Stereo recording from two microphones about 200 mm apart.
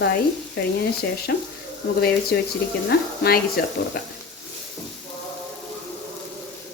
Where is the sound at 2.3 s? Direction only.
50° left (ahead or behind).